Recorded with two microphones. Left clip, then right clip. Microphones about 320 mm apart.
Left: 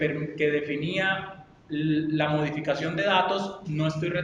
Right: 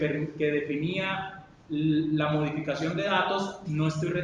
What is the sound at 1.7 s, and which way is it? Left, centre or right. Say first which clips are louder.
A man's voice: even; left.